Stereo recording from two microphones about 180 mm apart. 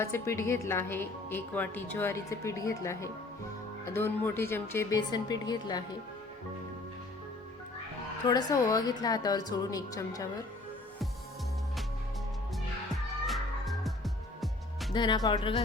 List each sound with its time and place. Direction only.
0.0 s a woman's voice: 15° left (ahead or behind)
8.2 s a woman's voice: 20° left (ahead or behind)
12.9 s music: centre (ahead or behind)
14.9 s a woman's voice: 25° left (ahead or behind)